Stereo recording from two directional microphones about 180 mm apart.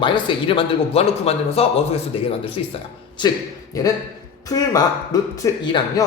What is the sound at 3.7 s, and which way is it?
A man's voice, 20° left (ahead or behind).